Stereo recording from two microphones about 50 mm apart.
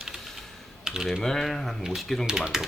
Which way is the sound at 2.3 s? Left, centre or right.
Centre.